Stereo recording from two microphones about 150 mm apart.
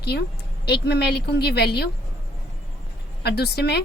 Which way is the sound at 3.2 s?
90° left.